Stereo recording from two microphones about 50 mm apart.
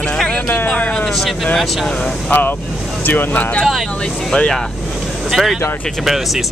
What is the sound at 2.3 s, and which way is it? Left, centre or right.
Speech, left.